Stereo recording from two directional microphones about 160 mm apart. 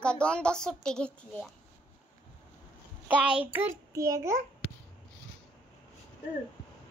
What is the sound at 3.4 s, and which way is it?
Speech, 10° right (ahead or behind).